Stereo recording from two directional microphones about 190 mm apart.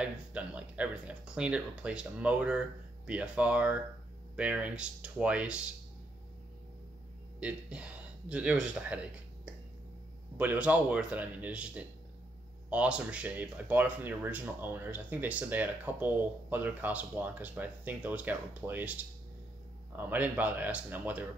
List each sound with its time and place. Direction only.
0.0 s speech: 5° right (ahead or behind)
7.3 s speech: 5° right (ahead or behind)
10.3 s speech: 10° right (ahead or behind)